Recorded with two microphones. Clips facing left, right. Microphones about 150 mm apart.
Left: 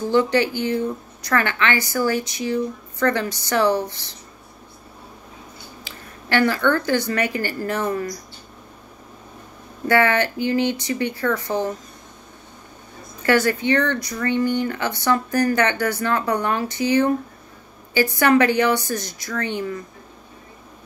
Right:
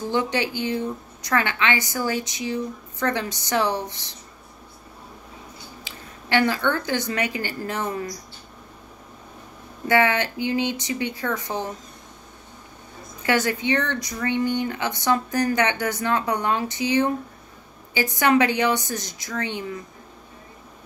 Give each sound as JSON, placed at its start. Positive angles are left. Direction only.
{"t": 0.1, "sound": "speech", "side_deg": -15}
{"t": 5.9, "sound": "speech", "side_deg": -15}
{"t": 9.8, "sound": "speech", "side_deg": -15}
{"t": 13.2, "sound": "a woman's voice", "side_deg": -15}